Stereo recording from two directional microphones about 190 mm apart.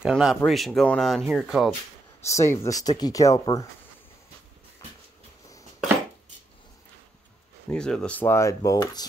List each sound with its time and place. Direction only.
0.0 s speech: 5° right (ahead or behind)
2.2 s speech: 15° left (ahead or behind)
7.6 s speech: 5° left (ahead or behind)